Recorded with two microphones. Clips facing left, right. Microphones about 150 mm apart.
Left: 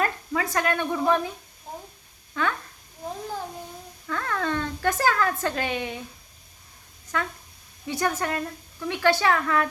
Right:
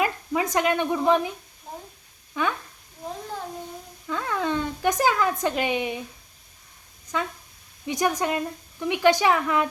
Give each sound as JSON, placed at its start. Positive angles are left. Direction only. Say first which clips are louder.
{"t": 0.0, "sound": "speech", "louder": "right 2 dB", "side_deg": -20}
{"t": 2.3, "sound": "speech", "louder": "right 1 dB", "side_deg": -15}
{"t": 4.0, "sound": "speech", "louder": "right 1 dB", "side_deg": -15}
{"t": 7.1, "sound": "speech", "louder": "right 1 dB", "side_deg": -15}